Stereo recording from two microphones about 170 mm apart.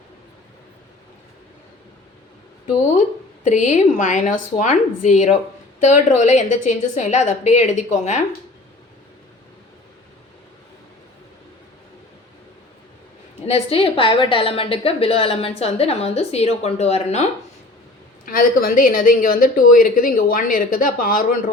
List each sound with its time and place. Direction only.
3.4 s a woman's voice: 45° left (ahead or behind)
13.5 s a woman's voice: 35° left (ahead or behind)
18.3 s speech: 55° left (ahead or behind)